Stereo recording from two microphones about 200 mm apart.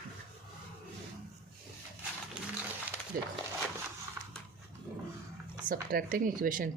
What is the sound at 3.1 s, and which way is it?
Speech, 45° right (ahead or behind).